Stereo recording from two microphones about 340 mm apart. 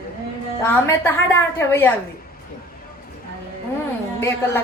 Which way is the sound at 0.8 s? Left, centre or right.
Centre.